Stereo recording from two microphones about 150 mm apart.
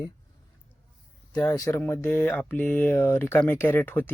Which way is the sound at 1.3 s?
25° left (ahead or behind).